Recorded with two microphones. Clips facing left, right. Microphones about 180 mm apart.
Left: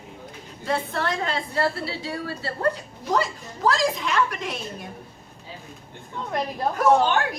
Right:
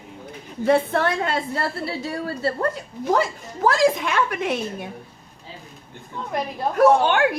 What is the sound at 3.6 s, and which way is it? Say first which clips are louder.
A woman's voice: right 4 dB; 55° right (ahead or behind).